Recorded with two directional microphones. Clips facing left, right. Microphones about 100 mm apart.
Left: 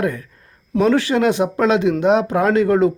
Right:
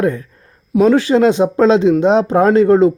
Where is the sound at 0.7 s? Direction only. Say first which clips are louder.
Right 5 dB; 15° right (ahead or behind).